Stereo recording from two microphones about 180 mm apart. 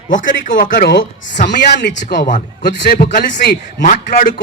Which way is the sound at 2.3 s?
55° left (ahead or behind).